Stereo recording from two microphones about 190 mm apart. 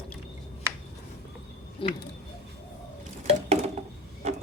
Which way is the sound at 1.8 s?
25° left (ahead or behind).